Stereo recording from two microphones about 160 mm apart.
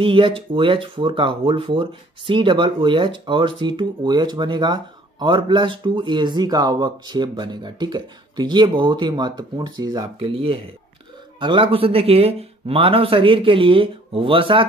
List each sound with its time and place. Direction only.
0.0 s speech: 35° right (ahead or behind)